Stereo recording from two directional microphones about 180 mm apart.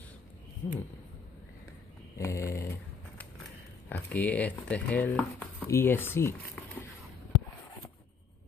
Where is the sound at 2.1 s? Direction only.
15° left (ahead or behind).